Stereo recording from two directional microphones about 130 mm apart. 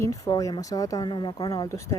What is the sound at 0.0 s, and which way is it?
A woman's voice, 25° left (ahead or behind).